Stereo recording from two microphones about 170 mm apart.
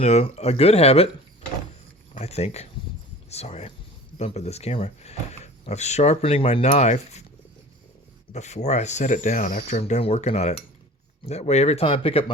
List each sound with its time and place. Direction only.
0.0 s speech: 40° left (ahead or behind)
2.1 s speech: 40° left (ahead or behind)
8.3 s speech: 40° left (ahead or behind)